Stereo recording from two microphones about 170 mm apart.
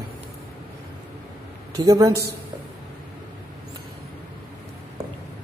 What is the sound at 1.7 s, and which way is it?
Speech, 20° right (ahead or behind).